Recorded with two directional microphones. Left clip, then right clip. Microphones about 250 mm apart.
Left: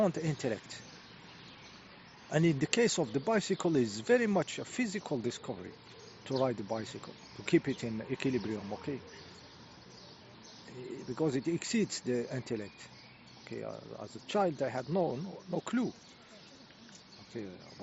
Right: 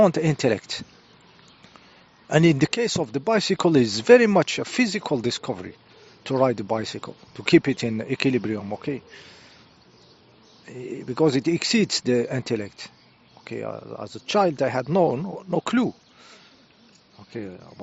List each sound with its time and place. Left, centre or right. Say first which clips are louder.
0.0 s speech: right 13 dB; right
2.3 s speech: right 11 dB; right
10.7 s speech: right 10 dB; right
17.3 s speech: right 9 dB; right